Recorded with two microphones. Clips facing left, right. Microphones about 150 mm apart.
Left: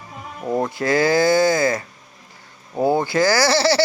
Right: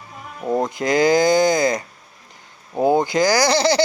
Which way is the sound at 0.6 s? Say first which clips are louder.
Right 1 dB; 15° right (ahead or behind).